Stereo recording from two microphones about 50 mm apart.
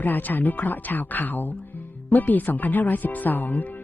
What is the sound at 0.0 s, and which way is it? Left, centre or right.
Speech, left.